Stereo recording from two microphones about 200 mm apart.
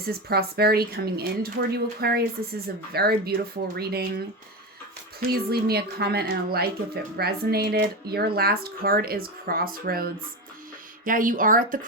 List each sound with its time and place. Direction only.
0.0 s speech: 50° right (ahead or behind)
5.3 s speech: 50° right (ahead or behind)